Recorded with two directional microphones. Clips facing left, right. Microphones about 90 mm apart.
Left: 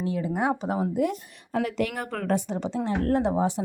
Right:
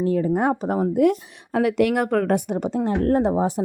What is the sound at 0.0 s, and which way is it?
Speech, 40° right (ahead or behind).